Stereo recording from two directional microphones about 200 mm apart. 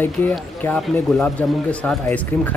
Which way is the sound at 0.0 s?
10° left (ahead or behind).